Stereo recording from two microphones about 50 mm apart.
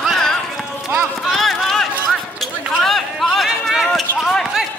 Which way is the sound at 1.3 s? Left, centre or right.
Centre.